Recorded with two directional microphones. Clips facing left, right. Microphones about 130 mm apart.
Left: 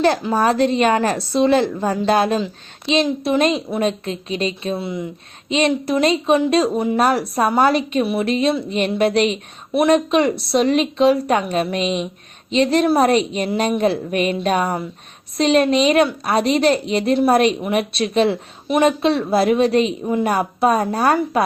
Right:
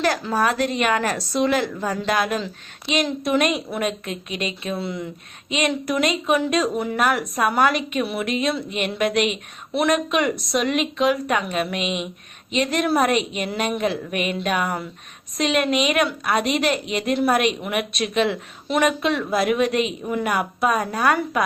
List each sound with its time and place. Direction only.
0.0 s a woman's voice: 30° left (ahead or behind)
4.8 s a woman's voice: 20° left (ahead or behind)
5.5 s a woman's voice: 30° left (ahead or behind)